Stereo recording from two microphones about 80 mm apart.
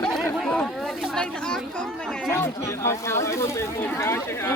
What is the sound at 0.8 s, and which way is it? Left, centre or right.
Chatter, centre.